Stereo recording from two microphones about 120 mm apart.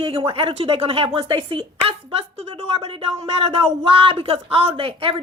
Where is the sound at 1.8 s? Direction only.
50° right (ahead or behind).